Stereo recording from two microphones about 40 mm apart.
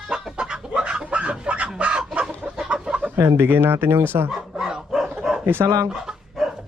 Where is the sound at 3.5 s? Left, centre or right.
Right.